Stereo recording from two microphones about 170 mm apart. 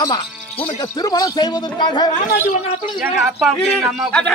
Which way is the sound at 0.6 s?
20° left (ahead or behind).